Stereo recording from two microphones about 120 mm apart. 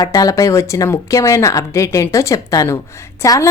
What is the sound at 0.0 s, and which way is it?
Speech, 30° left (ahead or behind).